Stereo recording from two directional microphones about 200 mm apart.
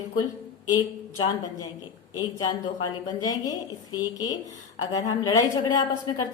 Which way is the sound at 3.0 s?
20° left (ahead or behind).